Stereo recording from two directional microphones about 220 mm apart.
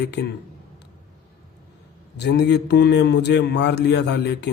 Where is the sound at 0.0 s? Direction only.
50° left (ahead or behind).